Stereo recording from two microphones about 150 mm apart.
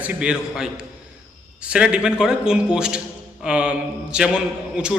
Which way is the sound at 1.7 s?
5° right (ahead or behind).